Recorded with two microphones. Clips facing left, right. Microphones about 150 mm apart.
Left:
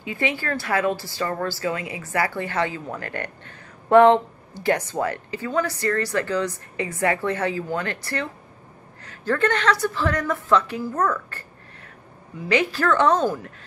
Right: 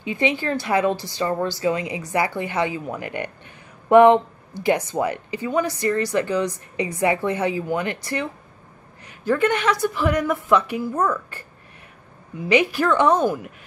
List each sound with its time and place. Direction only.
0.0 s a woman's voice: 20° right (ahead or behind)
12.4 s a woman's voice: 15° right (ahead or behind)